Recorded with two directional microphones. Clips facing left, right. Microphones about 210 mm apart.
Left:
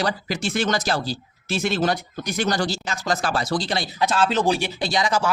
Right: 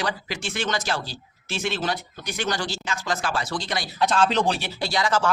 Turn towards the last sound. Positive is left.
turn(degrees=15)  # may be behind; listen again after turning